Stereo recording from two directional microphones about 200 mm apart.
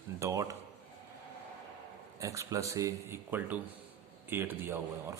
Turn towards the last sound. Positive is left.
turn(degrees=-10)  # may be behind; listen again after turning